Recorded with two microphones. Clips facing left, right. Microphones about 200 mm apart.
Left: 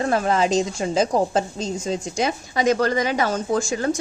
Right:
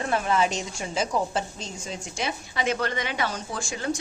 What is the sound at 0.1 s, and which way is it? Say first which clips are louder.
A woman's voice: left 3 dB; 35° left (ahead or behind).